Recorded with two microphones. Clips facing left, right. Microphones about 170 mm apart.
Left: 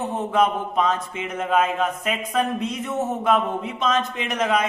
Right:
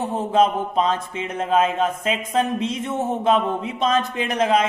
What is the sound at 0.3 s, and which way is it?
Speech, 30° right (ahead or behind).